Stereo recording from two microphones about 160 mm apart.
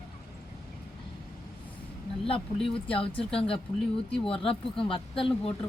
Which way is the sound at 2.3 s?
35° left (ahead or behind).